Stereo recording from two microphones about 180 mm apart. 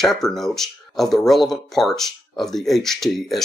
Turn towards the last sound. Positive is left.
turn(degrees=0)  # may be behind; listen again after turning